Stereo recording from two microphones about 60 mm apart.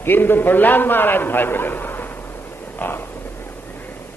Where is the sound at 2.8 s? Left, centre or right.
Left.